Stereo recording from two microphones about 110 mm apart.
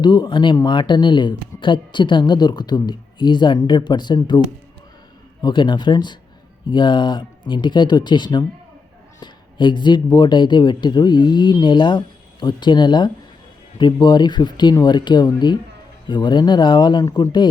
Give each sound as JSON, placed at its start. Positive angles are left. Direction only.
{"t": 0.0, "sound": "speech", "side_deg": 45}
{"t": 5.4, "sound": "speech", "side_deg": 45}